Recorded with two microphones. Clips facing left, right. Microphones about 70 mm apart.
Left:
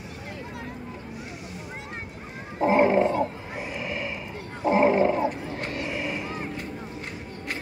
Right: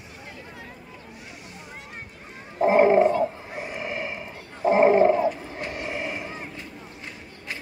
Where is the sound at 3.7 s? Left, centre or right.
Right.